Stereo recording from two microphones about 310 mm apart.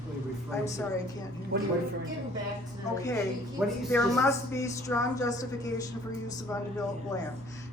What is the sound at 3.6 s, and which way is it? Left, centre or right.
A woman's voice, centre.